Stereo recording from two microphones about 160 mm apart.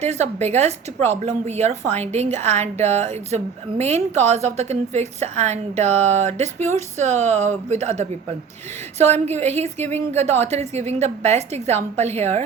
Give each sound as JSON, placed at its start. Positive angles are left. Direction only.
{"t": 0.0, "sound": "a woman's voice", "side_deg": -45}